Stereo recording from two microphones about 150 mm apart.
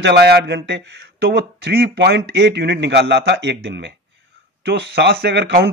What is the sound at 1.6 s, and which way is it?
A man's voice, 90° right.